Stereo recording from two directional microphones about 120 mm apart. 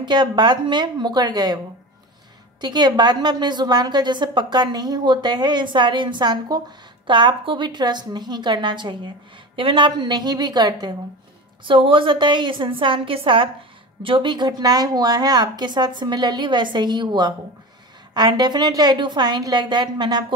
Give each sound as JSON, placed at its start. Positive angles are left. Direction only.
{"t": 0.0, "sound": "a woman's voice", "side_deg": -40}
{"t": 2.6, "sound": "a woman's voice", "side_deg": -35}
{"t": 11.6, "sound": "a woman's voice", "side_deg": -45}